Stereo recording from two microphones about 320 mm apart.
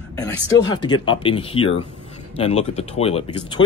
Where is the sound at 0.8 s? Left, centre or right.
Centre.